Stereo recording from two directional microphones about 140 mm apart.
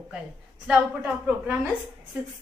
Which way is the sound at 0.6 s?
5° right (ahead or behind).